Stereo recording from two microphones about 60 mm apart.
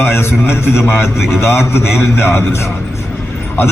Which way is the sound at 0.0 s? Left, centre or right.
Left.